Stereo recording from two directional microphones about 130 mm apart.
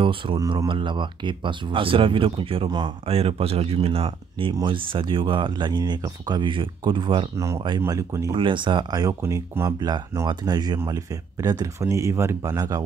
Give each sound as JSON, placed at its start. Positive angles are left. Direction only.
{"t": 0.0, "sound": "speech", "side_deg": -40}
{"t": 3.1, "sound": "speech", "side_deg": -50}
{"t": 7.3, "sound": "speech", "side_deg": -25}
{"t": 8.4, "sound": "speech", "side_deg": -40}
{"t": 9.2, "sound": "speech", "side_deg": -20}